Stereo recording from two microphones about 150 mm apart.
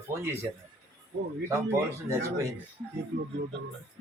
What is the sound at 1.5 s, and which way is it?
Speech, 20° right (ahead or behind).